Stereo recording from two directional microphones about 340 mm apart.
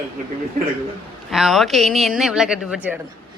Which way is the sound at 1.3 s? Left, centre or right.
Centre.